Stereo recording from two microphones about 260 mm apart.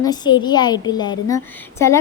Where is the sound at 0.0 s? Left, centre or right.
Centre.